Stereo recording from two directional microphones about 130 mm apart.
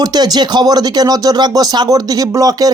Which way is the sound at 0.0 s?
30° right (ahead or behind).